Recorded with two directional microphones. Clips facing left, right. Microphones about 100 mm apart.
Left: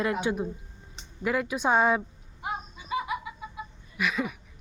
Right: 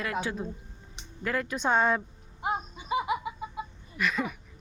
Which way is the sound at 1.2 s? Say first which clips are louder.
Left 3 dB; 10° left (ahead or behind).